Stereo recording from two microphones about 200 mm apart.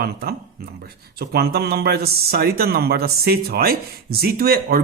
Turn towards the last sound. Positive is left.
turn(degrees=-50)  # may be behind; listen again after turning